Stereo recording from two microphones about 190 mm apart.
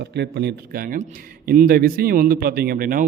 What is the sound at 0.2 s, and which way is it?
A man's voice, 60° right (ahead or behind).